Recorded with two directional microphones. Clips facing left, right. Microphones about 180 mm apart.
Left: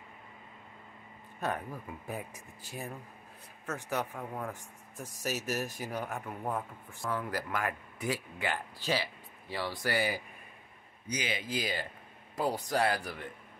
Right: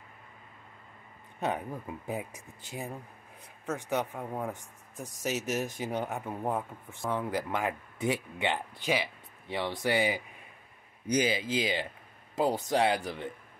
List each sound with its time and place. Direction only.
1.4 s speech: 20° right (ahead or behind)
11.1 s speech: 30° right (ahead or behind)